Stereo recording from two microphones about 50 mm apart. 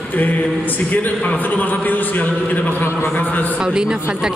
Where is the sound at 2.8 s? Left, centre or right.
Left.